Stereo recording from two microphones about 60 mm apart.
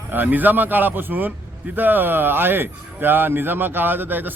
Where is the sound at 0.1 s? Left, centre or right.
Right.